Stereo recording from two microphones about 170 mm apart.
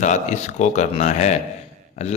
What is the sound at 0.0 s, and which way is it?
A man's voice, 45° left (ahead or behind).